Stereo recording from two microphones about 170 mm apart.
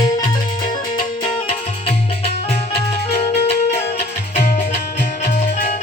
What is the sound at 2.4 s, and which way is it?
Music, 35° left (ahead or behind).